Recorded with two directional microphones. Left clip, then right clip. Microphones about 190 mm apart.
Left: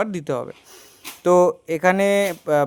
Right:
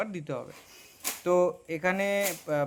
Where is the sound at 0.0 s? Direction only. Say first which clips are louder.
Left 10 dB; 55° left (ahead or behind).